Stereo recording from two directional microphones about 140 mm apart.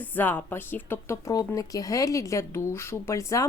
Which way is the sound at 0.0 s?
15° left (ahead or behind).